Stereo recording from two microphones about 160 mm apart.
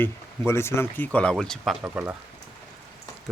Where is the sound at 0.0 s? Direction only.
15° left (ahead or behind).